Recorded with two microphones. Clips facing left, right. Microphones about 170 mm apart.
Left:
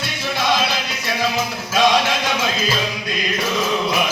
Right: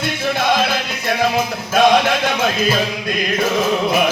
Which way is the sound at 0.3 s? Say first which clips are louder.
Right 1 dB; 55° right (ahead or behind).